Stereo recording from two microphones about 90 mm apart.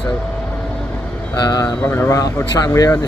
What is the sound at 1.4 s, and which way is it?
Speech, 45° left (ahead or behind).